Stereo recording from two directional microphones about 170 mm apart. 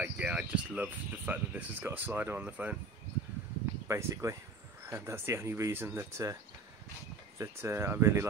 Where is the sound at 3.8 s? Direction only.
15° right (ahead or behind).